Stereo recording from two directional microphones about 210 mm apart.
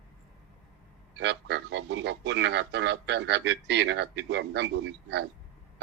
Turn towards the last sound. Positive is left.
turn(degrees=-55)  # may be behind; listen again after turning